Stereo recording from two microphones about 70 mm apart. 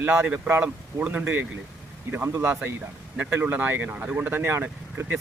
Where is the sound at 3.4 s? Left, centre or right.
Right.